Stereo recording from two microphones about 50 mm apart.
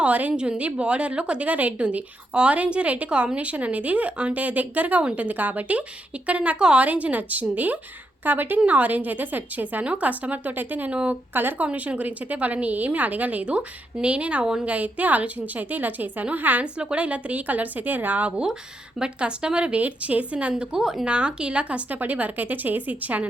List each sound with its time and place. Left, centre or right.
0.0 s speech: right
16.7 s speech: right
20.5 s speech: centre; by 23.3 s right